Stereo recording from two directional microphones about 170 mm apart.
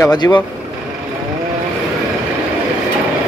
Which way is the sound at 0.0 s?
25° left (ahead or behind).